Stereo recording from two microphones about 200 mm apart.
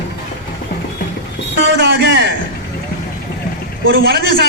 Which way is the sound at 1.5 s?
60° right (ahead or behind).